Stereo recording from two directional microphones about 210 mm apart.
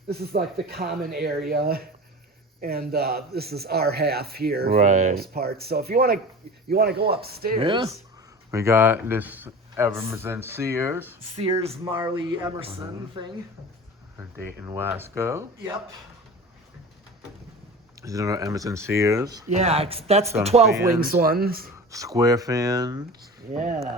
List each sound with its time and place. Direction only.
0.2 s speech: 50° right (ahead or behind)
4.8 s speech: 35° right (ahead or behind)
7.6 s speech: 25° right (ahead or behind)
8.4 s a man's voice: 10° right (ahead or behind)
11.3 s speech: 30° right (ahead or behind)
14.2 s a man's voice: 10° right (ahead or behind)
18.0 s a man's voice: 15° right (ahead or behind)
19.5 s speech: 30° right (ahead or behind)
21.0 s speech: 45° right (ahead or behind)
21.9 s a man's voice: 15° right (ahead or behind)
23.5 s speech: 35° right (ahead or behind)